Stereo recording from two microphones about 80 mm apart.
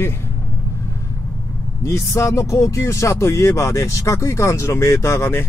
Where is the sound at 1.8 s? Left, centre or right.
Left.